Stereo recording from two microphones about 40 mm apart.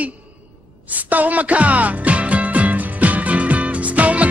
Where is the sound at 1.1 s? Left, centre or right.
Right.